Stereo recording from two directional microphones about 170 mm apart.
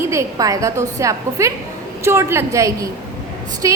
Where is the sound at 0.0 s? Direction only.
20° right (ahead or behind).